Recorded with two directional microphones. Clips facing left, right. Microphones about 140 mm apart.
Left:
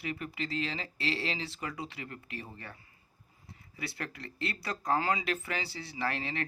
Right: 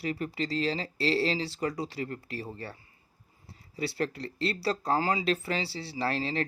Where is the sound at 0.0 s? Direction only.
35° right (ahead or behind).